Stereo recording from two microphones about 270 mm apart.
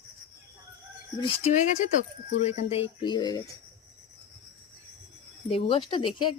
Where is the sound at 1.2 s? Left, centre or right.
Left.